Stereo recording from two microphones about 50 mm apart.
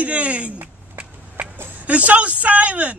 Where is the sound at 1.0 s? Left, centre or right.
Right.